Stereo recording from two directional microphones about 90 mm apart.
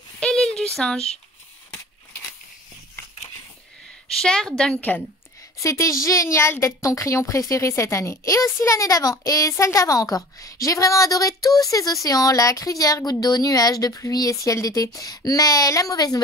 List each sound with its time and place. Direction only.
0.2 s a sound: 5° left (ahead or behind)
4.2 s a woman's voice: 5° left (ahead or behind)
5.6 s a woman's voice: 35° left (ahead or behind)